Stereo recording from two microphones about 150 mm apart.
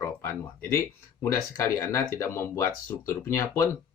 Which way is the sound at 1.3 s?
20° left (ahead or behind).